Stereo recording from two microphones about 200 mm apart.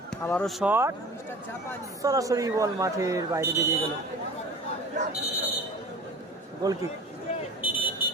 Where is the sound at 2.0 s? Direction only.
15° right (ahead or behind).